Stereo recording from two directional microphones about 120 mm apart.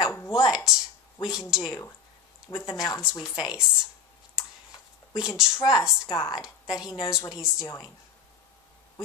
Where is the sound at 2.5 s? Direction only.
20° left (ahead or behind).